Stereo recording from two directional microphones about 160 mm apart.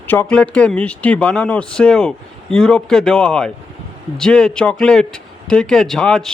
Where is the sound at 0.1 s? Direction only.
10° left (ahead or behind).